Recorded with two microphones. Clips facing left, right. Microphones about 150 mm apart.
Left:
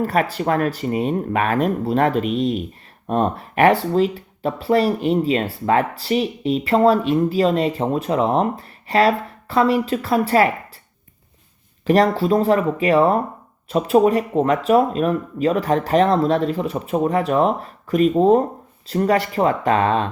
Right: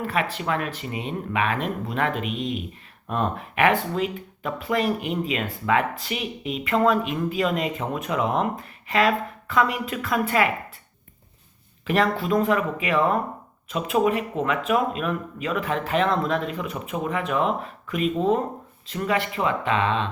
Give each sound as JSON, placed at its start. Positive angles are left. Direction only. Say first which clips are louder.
{"t": 0.0, "sound": "speech", "louder": "left 6 dB", "side_deg": 40}
{"t": 11.9, "sound": "speech", "louder": "left 6 dB", "side_deg": 35}